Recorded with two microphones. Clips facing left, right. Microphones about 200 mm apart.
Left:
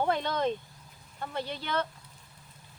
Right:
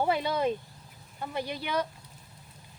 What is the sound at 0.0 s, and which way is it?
Speech, 10° right (ahead or behind).